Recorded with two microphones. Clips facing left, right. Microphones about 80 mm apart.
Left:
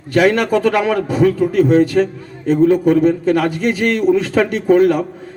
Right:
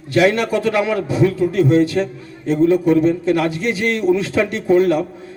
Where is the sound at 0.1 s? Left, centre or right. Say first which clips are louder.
Left 2 dB; left.